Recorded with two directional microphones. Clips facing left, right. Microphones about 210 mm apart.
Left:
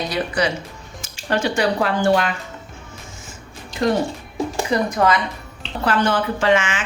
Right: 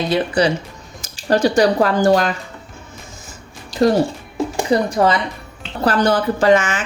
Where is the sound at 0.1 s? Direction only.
30° right (ahead or behind).